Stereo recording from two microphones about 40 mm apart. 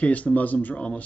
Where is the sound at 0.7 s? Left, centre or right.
Left.